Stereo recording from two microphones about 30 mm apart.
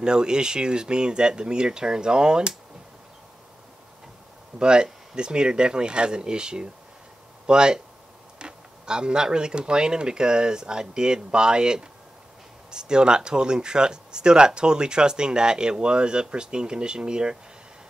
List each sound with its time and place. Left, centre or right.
0.0 s speech: right
4.6 s speech: right